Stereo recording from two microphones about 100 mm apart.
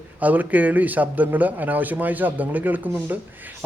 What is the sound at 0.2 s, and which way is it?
A man's voice, 15° right (ahead or behind).